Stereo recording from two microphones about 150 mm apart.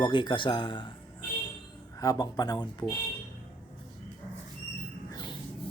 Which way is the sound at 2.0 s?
25° left (ahead or behind).